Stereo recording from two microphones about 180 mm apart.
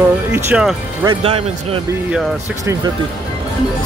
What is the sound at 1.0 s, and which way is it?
Speech, 30° right (ahead or behind).